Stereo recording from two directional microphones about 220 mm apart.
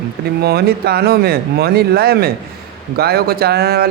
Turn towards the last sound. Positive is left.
turn(degrees=-45)  # may be behind; listen again after turning